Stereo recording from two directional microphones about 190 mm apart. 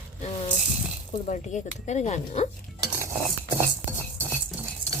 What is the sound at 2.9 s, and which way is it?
Cutlery, 10° right (ahead or behind).